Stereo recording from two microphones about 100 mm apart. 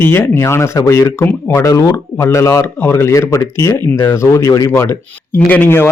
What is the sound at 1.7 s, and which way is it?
Speech, 35° left (ahead or behind).